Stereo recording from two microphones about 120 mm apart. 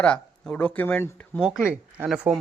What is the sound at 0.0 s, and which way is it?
A man's voice, 10° left (ahead or behind).